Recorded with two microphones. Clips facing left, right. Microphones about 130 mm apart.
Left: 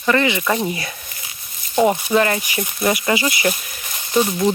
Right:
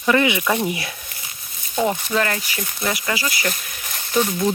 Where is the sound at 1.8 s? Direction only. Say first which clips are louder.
Left 5 dB; 15° left (ahead or behind).